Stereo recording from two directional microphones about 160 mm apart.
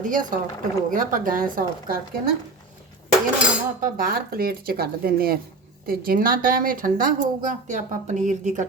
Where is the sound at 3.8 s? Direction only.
65° right (ahead or behind).